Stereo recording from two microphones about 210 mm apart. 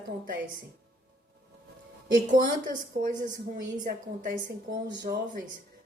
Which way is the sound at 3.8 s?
40° right (ahead or behind).